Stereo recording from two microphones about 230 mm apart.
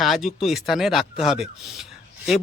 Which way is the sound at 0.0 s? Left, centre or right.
Centre.